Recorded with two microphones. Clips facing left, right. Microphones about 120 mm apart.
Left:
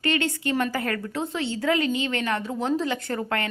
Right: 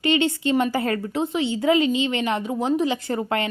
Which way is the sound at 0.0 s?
20° right (ahead or behind).